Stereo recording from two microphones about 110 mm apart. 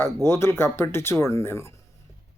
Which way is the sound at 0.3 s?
20° left (ahead or behind).